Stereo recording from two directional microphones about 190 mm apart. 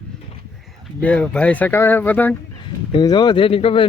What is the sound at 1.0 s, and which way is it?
Speech, 5° left (ahead or behind).